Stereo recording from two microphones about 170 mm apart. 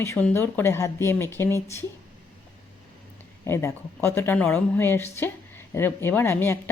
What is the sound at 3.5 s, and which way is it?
A woman's voice, 15° left (ahead or behind).